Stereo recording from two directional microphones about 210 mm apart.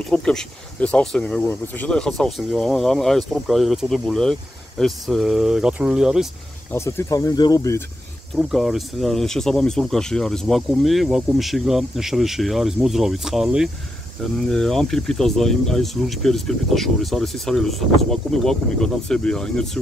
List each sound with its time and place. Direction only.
0.1 s speech: 5° left (ahead or behind)
6.7 s speech: 10° left (ahead or behind)
8.4 s speech: centre (ahead or behind)